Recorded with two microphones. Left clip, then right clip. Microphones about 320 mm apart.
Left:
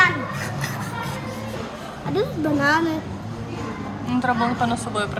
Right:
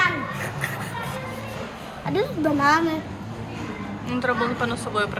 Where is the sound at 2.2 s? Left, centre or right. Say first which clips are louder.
Even; centre.